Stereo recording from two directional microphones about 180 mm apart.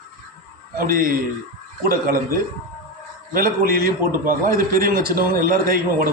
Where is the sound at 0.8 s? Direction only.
50° right (ahead or behind).